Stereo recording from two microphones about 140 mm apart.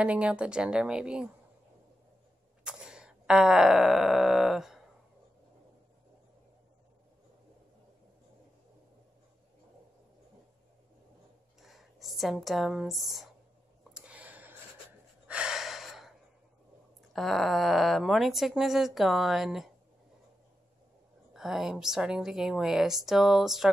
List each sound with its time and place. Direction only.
0.0 s speech: 10° right (ahead or behind)
2.6 s wail: 5° right (ahead or behind)
11.6 s speech: centre (ahead or behind)
13.9 s a sound: 10° right (ahead or behind)
15.2 s gasp: 5° right (ahead or behind)
17.1 s speech: centre (ahead or behind)
21.3 s speech: centre (ahead or behind)